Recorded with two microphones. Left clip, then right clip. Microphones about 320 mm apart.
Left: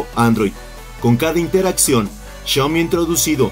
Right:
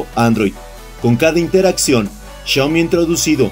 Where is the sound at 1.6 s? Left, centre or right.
Centre.